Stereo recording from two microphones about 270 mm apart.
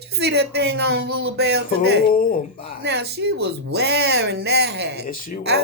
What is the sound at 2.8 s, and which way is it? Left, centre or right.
Speech, right.